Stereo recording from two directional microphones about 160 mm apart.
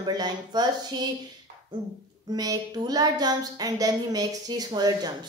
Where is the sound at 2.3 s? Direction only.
25° right (ahead or behind).